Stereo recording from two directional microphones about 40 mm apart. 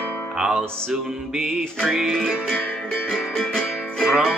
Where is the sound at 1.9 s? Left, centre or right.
Centre.